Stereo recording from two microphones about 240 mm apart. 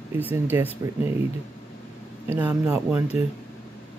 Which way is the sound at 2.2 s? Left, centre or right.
Centre.